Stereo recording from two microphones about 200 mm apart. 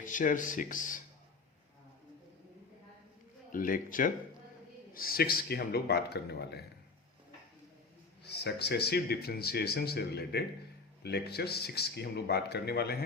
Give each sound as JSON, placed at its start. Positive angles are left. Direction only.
{"t": 0.0, "sound": "speech", "side_deg": 40}
{"t": 3.5, "sound": "speech", "side_deg": 45}
{"t": 8.2, "sound": "speech", "side_deg": 55}